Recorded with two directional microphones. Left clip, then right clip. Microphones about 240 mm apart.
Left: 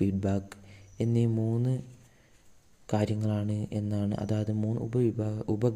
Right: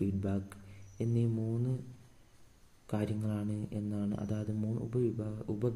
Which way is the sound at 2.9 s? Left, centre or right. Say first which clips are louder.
Left 7 dB; left.